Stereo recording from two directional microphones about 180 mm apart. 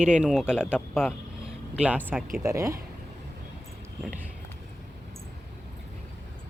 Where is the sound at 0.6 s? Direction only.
10° left (ahead or behind).